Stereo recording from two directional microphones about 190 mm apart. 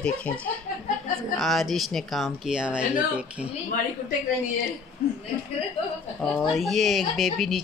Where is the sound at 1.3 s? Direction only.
Centre (ahead or behind).